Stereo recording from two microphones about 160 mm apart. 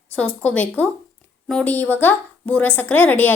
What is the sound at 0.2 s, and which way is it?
A woman's voice, 5° left (ahead or behind).